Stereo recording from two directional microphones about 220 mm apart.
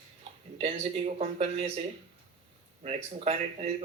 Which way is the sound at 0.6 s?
30° right (ahead or behind).